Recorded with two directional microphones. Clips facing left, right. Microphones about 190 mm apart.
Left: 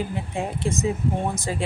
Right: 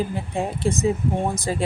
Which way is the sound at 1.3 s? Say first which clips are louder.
Right 3 dB; 35° right (ahead or behind).